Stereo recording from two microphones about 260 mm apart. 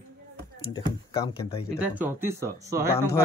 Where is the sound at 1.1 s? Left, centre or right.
Centre.